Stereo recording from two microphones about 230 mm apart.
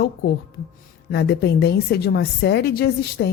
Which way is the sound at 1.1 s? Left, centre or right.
Left.